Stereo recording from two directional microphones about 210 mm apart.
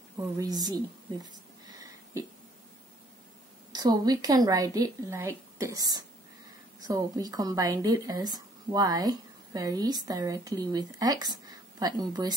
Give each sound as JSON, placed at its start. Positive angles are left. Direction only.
{"t": 0.4, "sound": "a woman's voice", "side_deg": -20}
{"t": 3.7, "sound": "speech", "side_deg": -20}